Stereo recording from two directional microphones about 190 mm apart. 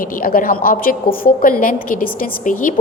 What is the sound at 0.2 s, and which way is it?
A woman's voice, 50° left (ahead or behind).